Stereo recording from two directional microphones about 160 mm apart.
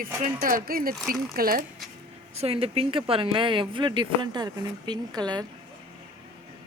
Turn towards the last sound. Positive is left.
turn(degrees=-25)  # may be behind; listen again after turning